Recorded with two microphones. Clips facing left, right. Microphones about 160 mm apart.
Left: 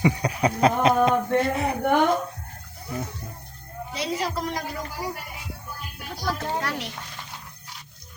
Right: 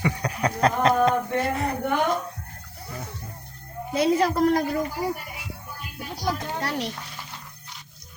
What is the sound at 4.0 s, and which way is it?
Speech, 55° right (ahead or behind).